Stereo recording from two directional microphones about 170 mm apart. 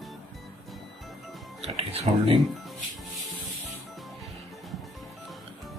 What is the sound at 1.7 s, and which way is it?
Speech, 35° right (ahead or behind).